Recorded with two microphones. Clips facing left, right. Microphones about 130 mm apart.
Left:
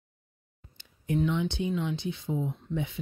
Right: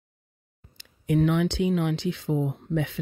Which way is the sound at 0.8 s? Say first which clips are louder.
Right 5 dB; 80° right.